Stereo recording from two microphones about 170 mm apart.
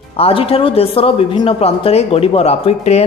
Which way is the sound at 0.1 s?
35° left (ahead or behind).